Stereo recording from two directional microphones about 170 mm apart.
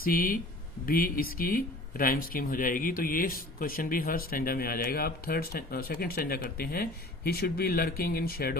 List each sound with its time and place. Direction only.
0.0 s speech: 60° left (ahead or behind)